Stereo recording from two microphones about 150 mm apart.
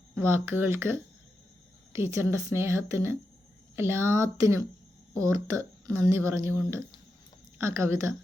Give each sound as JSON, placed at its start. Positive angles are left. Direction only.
{"t": 0.2, "sound": "a woman's voice", "side_deg": -15}